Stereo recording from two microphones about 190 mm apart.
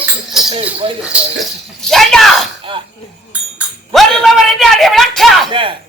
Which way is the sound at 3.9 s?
Centre (ahead or behind).